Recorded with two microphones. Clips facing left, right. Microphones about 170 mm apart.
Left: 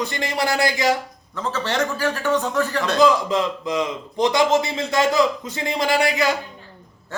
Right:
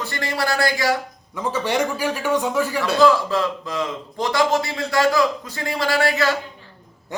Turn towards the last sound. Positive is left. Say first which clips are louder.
# even
turn(degrees=15)  # may be behind; listen again after turning